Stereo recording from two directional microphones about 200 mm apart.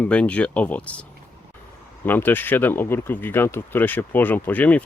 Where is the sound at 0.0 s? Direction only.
5° left (ahead or behind).